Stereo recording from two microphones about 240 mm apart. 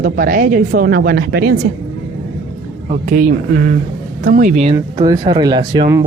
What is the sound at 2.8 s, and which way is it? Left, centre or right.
Speech, right.